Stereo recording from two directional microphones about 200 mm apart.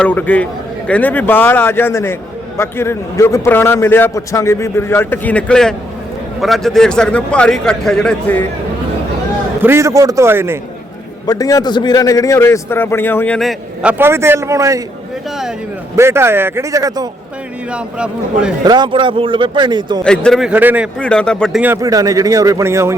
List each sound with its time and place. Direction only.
0.0 s a man's voice: 10° left (ahead or behind)
9.6 s speech: 10° right (ahead or behind)
11.3 s a man's voice: 15° left (ahead or behind); by 13.9 s centre (ahead or behind)
14.0 s speech: 10° right (ahead or behind)
16.0 s speech: 15° right (ahead or behind)
17.7 s a man's voice: 5° right (ahead or behind)
18.6 s speech: 20° right (ahead or behind)
20.1 s a man's voice: centre (ahead or behind)
21.0 s a man's voice: 5° left (ahead or behind)
21.6 s speech: 15° right (ahead or behind)